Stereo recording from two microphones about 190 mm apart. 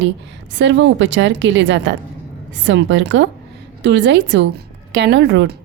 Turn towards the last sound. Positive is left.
turn(degrees=-70)  # may be behind; listen again after turning